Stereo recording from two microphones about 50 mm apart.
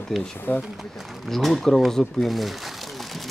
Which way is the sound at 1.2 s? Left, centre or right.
Centre.